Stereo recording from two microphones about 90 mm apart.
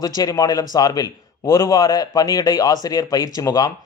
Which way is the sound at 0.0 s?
45° left (ahead or behind).